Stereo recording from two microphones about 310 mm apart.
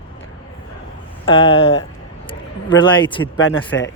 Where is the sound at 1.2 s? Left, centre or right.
Centre.